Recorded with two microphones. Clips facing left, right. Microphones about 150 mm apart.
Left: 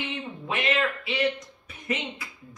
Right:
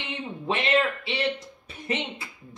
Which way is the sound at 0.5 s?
30° right (ahead or behind).